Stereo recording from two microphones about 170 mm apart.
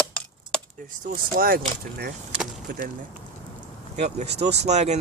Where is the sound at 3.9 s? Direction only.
40° right (ahead or behind).